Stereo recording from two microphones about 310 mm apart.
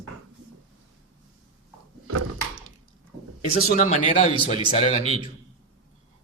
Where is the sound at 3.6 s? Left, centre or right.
Left.